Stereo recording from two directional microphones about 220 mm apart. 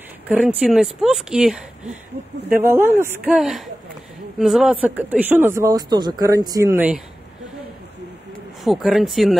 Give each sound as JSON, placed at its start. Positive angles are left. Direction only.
{"t": 0.3, "sound": "speech", "side_deg": -5}
{"t": 2.6, "sound": "speech", "side_deg": -10}
{"t": 8.6, "sound": "speech", "side_deg": 0}